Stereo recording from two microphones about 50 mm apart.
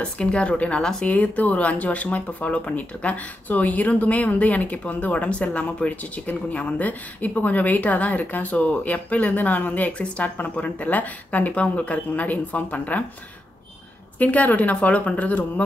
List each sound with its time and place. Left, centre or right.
0.0 s a woman's voice: left
14.1 s speech: left